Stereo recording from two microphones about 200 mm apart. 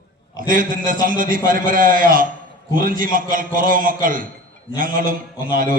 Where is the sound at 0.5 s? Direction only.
45° right (ahead or behind).